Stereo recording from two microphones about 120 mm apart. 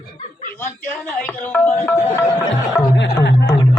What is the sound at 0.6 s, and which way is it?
Speech, 15° left (ahead or behind).